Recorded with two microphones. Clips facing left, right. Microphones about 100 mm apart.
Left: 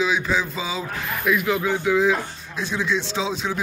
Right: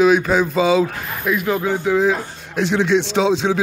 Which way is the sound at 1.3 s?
40° right (ahead or behind).